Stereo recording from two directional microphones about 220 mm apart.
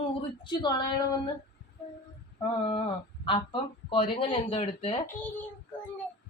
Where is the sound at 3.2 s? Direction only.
25° left (ahead or behind).